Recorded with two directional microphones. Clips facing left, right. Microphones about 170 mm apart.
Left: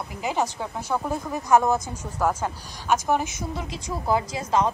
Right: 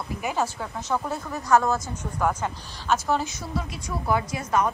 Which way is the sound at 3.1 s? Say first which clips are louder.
Left 2 dB; 20° left (ahead or behind).